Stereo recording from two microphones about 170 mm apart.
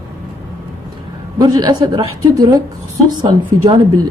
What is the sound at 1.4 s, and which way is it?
A woman's voice, 20° right (ahead or behind).